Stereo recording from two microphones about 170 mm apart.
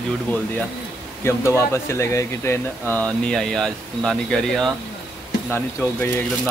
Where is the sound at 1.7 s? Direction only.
15° left (ahead or behind).